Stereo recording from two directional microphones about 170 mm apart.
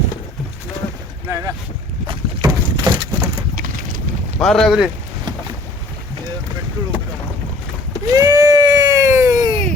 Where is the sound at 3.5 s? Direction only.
50° right (ahead or behind).